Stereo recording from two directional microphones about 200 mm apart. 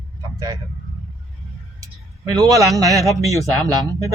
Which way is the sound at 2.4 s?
15° right (ahead or behind).